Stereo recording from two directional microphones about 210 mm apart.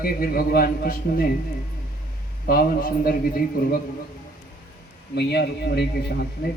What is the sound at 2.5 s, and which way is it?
A man's voice, 45° left (ahead or behind).